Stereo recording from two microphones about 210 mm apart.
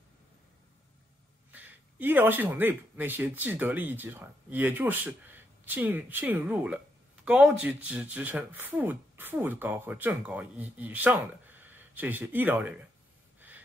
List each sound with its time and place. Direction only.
1.5 s speech: 10° right (ahead or behind)